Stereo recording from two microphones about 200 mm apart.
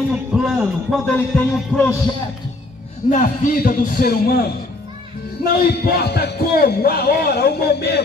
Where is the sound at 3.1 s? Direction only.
40° left (ahead or behind).